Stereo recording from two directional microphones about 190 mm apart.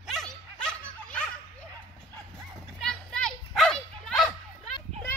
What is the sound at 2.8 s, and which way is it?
Dog, centre (ahead or behind).